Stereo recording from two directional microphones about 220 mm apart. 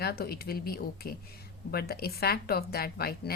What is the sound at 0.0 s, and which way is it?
Speech, 45° left (ahead or behind).